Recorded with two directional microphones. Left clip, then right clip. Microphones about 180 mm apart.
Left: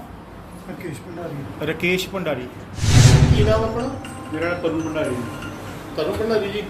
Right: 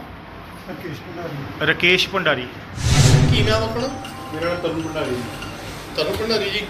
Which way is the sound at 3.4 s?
60° left (ahead or behind).